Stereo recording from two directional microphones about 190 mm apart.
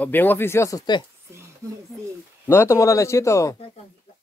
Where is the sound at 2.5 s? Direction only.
15° left (ahead or behind).